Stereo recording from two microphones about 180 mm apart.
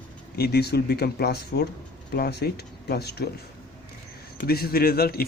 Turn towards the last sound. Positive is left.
turn(degrees=60)  # may be behind; listen again after turning